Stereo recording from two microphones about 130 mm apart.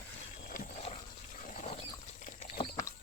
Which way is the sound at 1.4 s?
65° left (ahead or behind).